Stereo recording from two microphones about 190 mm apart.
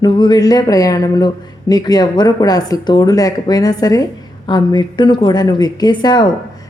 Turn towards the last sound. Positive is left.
turn(degrees=25)  # may be behind; listen again after turning